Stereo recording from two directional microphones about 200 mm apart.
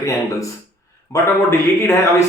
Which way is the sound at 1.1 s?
15° left (ahead or behind).